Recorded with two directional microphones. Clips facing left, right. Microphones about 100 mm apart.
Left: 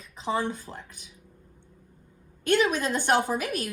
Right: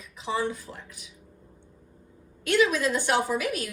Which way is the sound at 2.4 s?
50° left (ahead or behind).